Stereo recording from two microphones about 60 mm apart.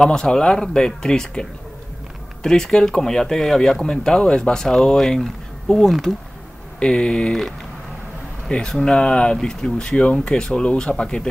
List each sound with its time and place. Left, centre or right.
0.0 s speech: centre
8.5 s speech: centre